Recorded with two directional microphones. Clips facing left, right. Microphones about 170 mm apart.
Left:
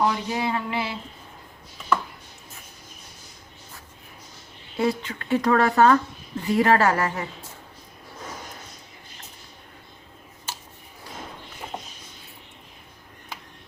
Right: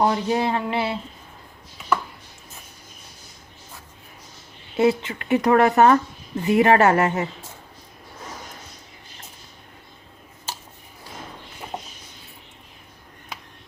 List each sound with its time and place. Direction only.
0.0 s speech: 40° right (ahead or behind)
4.8 s speech: 20° right (ahead or behind)